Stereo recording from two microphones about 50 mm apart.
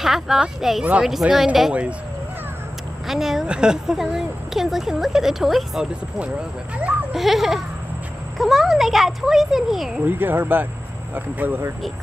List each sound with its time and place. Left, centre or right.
0.0 s speech: centre
1.7 s speech: right
3.1 s a woman's voice: centre
7.1 s speech: centre
10.0 s speech: right